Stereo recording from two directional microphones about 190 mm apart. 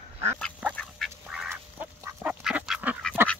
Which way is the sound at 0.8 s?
Centre (ahead or behind).